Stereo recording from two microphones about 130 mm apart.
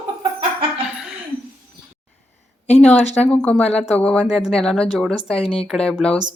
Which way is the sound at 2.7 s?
10° left (ahead or behind).